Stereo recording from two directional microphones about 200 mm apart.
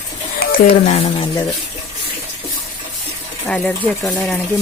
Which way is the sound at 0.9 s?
30° left (ahead or behind).